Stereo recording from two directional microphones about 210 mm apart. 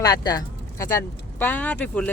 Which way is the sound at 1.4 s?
10° left (ahead or behind).